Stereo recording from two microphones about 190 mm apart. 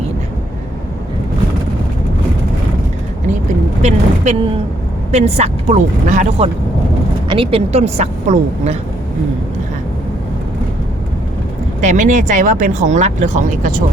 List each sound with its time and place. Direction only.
3.8 s speech: 35° right (ahead or behind)
11.8 s speech: 40° right (ahead or behind)